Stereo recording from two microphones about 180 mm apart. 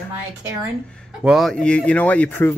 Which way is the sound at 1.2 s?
Centre (ahead or behind).